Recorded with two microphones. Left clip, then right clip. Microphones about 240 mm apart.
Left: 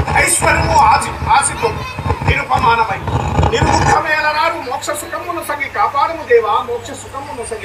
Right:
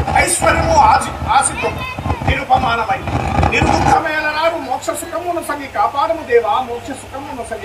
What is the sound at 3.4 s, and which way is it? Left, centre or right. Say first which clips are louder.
Roar: even; right.